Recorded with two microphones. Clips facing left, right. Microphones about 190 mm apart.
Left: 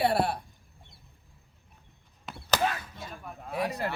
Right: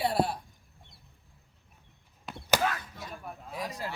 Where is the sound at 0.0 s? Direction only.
65° left (ahead or behind).